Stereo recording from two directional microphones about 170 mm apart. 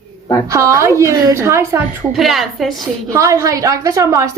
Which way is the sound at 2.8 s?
20° right (ahead or behind).